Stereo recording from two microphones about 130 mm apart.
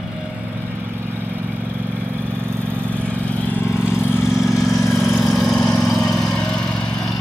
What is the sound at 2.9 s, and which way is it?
Vehicle, 10° left (ahead or behind).